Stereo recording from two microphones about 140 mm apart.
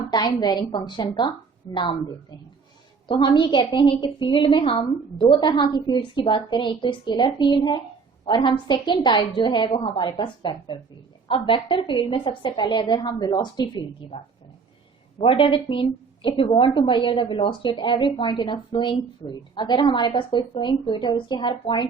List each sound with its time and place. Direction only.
0.1 s a woman's voice: 30° left (ahead or behind)
3.1 s a woman's voice: 35° left (ahead or behind)
15.2 s a woman's voice: 40° left (ahead or behind)